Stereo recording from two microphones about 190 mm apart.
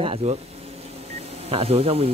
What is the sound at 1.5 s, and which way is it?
Speech, 30° right (ahead or behind).